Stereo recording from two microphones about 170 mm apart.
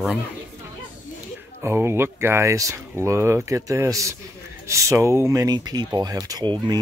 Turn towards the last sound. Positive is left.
turn(degrees=-25)  # may be behind; listen again after turning